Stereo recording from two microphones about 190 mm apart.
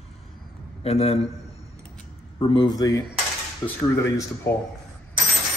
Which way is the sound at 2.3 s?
25° left (ahead or behind).